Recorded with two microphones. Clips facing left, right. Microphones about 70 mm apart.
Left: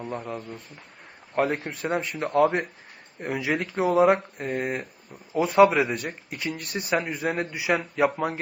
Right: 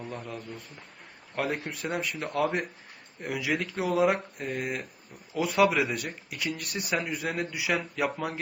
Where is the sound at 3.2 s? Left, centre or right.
Left.